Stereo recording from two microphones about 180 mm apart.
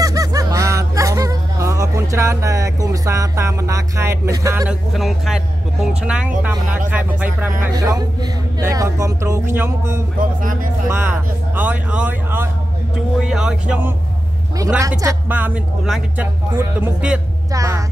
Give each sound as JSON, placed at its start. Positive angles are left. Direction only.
{"t": 0.0, "sound": "laughter", "side_deg": -20}
{"t": 4.6, "sound": "speech", "side_deg": 0}
{"t": 7.7, "sound": "speech", "side_deg": -20}
{"t": 10.1, "sound": "speech", "side_deg": -50}
{"t": 10.9, "sound": "speech", "side_deg": -10}
{"t": 17.5, "sound": "music", "side_deg": -20}